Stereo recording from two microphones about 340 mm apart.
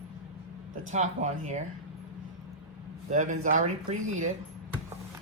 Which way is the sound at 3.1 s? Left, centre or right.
Right.